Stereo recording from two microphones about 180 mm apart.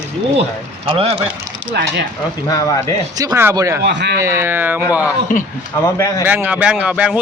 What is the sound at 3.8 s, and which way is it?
Speech, 70° right (ahead or behind).